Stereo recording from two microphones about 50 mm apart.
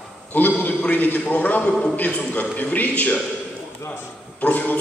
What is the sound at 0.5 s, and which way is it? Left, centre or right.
A man's voice, left.